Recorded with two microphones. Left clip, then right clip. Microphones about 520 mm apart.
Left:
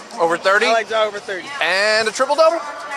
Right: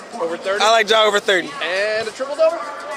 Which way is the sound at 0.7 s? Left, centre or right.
Right.